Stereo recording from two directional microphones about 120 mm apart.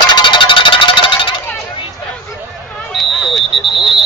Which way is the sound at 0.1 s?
40° left (ahead or behind).